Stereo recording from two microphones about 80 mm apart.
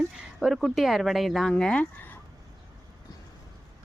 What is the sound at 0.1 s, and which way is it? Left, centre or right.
Speech, centre.